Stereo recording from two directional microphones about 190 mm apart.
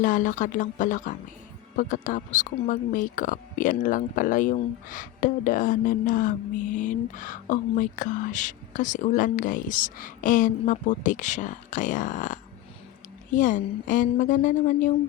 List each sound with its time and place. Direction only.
0.0 s speech: 45° left (ahead or behind)